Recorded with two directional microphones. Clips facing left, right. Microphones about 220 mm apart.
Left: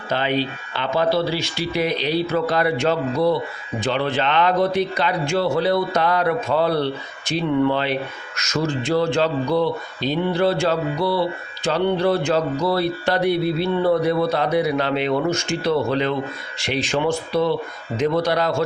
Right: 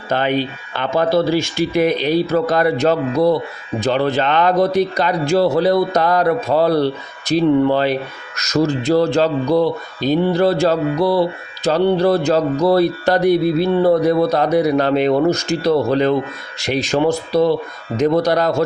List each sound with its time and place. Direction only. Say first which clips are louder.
0.1 s speech: right 4 dB; 50° right (ahead or behind)